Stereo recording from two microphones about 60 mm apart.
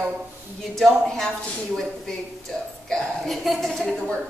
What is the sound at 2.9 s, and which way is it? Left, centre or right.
Speech, centre.